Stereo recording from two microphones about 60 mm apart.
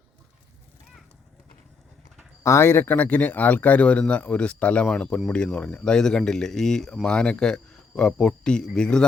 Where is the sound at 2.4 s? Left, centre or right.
Left.